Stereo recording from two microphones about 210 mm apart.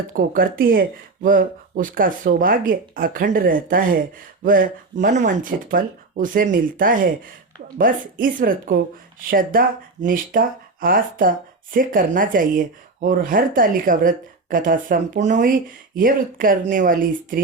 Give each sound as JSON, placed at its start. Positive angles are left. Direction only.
{"t": 0.1, "sound": "speech", "side_deg": -40}